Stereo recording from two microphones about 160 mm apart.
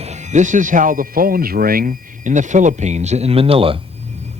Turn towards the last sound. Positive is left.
turn(degrees=-35)  # may be behind; listen again after turning